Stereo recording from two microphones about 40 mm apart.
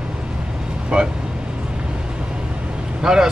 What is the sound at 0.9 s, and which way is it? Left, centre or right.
Speech, right.